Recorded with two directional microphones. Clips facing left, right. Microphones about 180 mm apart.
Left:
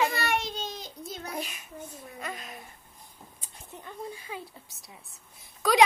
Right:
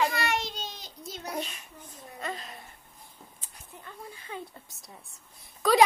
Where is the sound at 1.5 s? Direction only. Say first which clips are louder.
Left 6 dB; 10° left (ahead or behind).